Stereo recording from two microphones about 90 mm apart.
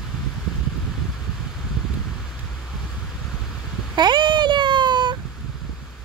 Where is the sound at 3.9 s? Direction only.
55° right (ahead or behind).